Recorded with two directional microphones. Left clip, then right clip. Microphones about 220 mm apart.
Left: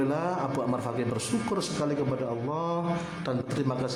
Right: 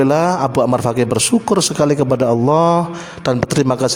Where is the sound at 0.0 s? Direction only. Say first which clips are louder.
Right 15 dB; 50° right (ahead or behind).